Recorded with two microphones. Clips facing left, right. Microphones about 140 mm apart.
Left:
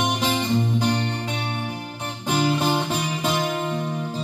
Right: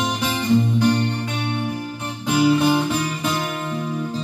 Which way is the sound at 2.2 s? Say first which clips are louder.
Right 5 dB; 10° right (ahead or behind).